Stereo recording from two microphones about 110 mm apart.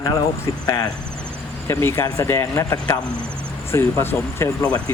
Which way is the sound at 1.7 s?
25° left (ahead or behind).